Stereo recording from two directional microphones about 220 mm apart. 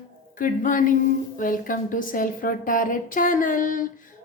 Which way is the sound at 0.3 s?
35° left (ahead or behind).